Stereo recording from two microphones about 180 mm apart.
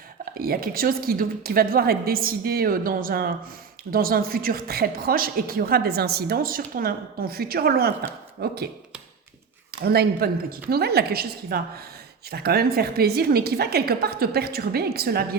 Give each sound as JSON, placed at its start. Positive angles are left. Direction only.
{"t": 0.3, "sound": "a woman's voice", "side_deg": -55}
{"t": 9.8, "sound": "a woman's voice", "side_deg": -60}